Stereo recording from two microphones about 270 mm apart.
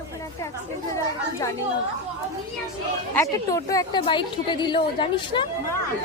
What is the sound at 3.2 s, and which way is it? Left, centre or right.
A woman's voice, centre.